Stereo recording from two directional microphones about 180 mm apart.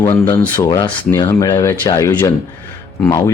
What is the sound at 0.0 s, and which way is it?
Speech, 15° left (ahead or behind).